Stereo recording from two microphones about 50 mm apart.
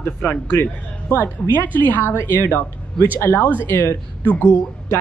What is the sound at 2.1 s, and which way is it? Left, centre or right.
Speech, left.